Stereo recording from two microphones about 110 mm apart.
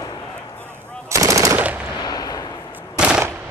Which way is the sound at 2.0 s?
35° left (ahead or behind).